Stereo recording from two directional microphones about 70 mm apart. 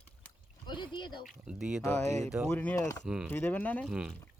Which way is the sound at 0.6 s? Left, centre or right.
Left.